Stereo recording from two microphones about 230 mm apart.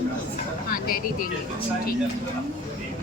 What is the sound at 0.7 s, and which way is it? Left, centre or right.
Speech, left.